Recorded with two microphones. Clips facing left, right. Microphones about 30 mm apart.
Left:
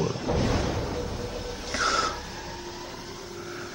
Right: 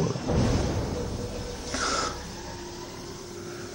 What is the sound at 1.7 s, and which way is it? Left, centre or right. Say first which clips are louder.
Gasp: left 3 dB; centre.